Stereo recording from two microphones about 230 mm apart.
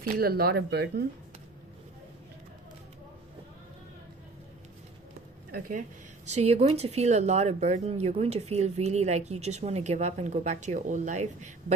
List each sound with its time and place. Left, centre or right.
0.2 s speech: right
5.5 s speech: right
6.2 s speech: right